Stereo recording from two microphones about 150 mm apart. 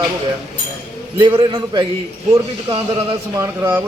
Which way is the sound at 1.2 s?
30° right (ahead or behind).